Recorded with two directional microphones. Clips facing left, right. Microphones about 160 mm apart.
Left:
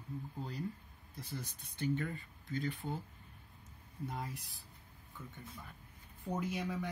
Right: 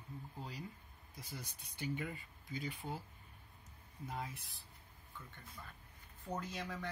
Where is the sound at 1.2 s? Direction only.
10° right (ahead or behind).